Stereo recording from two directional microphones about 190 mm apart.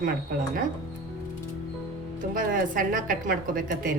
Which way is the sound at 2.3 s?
45° right (ahead or behind).